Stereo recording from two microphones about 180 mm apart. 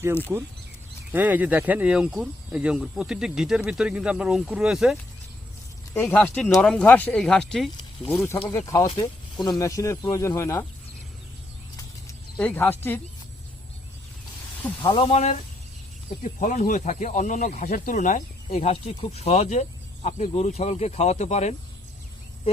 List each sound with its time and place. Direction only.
1.1 s speech: 10° right (ahead or behind)
5.9 s speech: 10° left (ahead or behind)
8.1 s speech: 15° left (ahead or behind)
12.0 s speech: 10° left (ahead or behind)
14.8 s speech: 30° left (ahead or behind)